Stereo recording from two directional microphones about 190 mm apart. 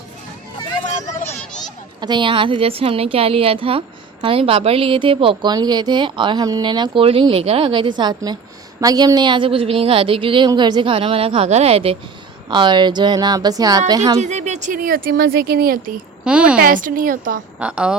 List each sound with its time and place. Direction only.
1.1 s a sound: 35° left (ahead or behind)
2.0 s a woman's voice: 25° right (ahead or behind)
14.2 s a woman's voice: 35° right (ahead or behind); by 15.8 s 55° right (ahead or behind)
16.2 s a woman's voice: 5° right (ahead or behind)
16.6 s a woman's voice: 45° right (ahead or behind)
17.6 s a woman's voice: 5° right (ahead or behind)